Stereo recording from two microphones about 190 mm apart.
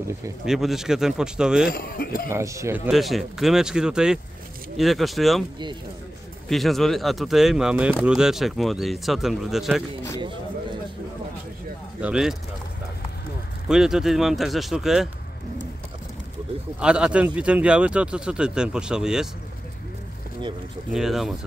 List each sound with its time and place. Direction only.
0.5 s speech: centre (ahead or behind)
1.7 s speech: 50° left (ahead or behind)
2.3 s speech: 15° right (ahead or behind); by 5.4 s centre (ahead or behind)
6.5 s speech: centre (ahead or behind)
12.0 s speech: 5° right (ahead or behind)
13.7 s speech: 5° right (ahead or behind)
16.8 s speech: 5° right (ahead or behind)
20.9 s speech: centre (ahead or behind)